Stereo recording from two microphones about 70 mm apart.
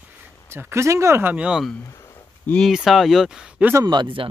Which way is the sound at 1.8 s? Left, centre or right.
Left.